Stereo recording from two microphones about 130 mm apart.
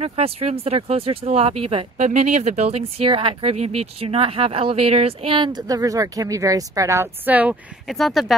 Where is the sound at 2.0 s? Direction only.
65° right (ahead or behind); by 7.5 s 10° right (ahead or behind).